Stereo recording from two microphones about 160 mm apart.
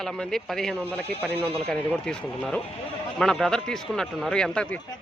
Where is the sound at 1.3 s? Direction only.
35° right (ahead or behind).